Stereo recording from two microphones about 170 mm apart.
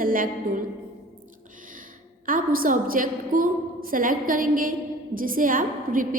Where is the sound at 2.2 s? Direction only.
55° right (ahead or behind).